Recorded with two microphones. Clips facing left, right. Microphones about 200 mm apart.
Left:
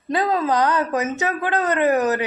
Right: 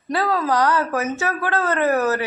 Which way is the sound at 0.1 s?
20° left (ahead or behind).